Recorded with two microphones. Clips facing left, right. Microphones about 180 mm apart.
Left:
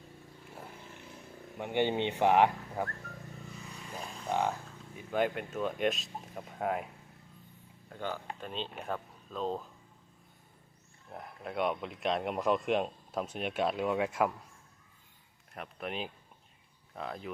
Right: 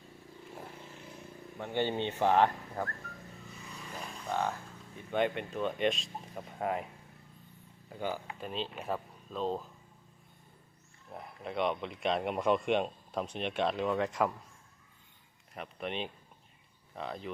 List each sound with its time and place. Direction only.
1.5 s speech: 15° left (ahead or behind)
4.3 s speech: 15° left (ahead or behind)
4.9 s speech: centre (ahead or behind)
7.9 s speech: 10° right (ahead or behind)
11.1 s speech: centre (ahead or behind)
15.5 s speech: centre (ahead or behind)